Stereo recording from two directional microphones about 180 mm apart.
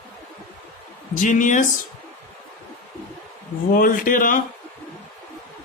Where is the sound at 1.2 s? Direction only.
45° left (ahead or behind).